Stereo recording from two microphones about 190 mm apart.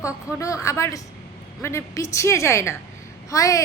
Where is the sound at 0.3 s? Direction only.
15° left (ahead or behind).